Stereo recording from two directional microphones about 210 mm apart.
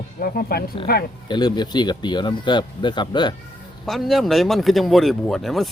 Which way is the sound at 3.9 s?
Centre (ahead or behind).